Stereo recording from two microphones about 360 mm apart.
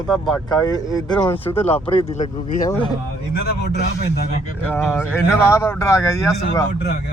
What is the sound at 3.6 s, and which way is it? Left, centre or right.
Speech, left.